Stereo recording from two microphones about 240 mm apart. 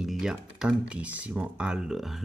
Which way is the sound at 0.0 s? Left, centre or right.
Centre.